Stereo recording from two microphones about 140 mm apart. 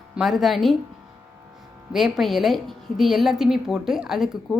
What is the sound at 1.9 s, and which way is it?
A woman's voice, centre (ahead or behind).